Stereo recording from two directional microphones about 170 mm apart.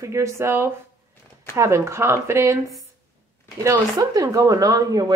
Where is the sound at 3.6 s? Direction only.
20° right (ahead or behind).